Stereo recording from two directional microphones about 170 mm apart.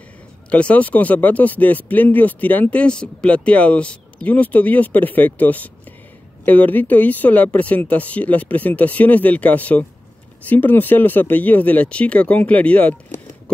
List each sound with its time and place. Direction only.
0.5 s speech: 5° left (ahead or behind)